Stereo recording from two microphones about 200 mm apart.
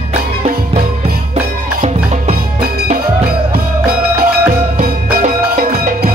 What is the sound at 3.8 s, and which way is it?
Music, 50° right (ahead or behind).